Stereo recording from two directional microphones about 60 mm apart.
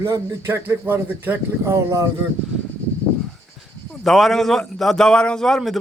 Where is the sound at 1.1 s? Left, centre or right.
Right.